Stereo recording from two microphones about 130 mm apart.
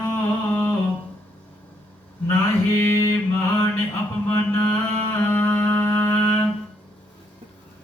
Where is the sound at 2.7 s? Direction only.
20° left (ahead or behind).